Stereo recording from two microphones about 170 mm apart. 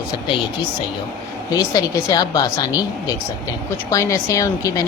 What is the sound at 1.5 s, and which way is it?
Speech, 20° left (ahead or behind).